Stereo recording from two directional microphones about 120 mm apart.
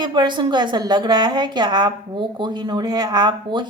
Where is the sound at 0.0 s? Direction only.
40° right (ahead or behind).